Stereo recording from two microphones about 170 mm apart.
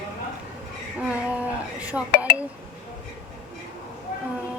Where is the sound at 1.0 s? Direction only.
10° right (ahead or behind).